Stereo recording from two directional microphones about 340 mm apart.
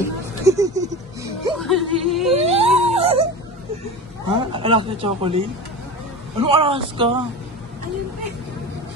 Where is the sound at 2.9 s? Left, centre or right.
Centre.